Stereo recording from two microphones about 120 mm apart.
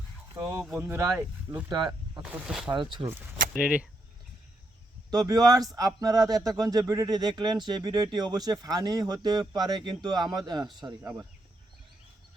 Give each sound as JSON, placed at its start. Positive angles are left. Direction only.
{"t": 0.8, "sound": "speech", "side_deg": -20}
{"t": 1.7, "sound": "speech", "side_deg": -35}
{"t": 2.2, "sound": "speech", "side_deg": -5}
{"t": 2.7, "sound": "a man's voice", "side_deg": -40}
{"t": 3.6, "sound": "speech", "side_deg": -10}
{"t": 5.1, "sound": "a man's voice", "side_deg": -30}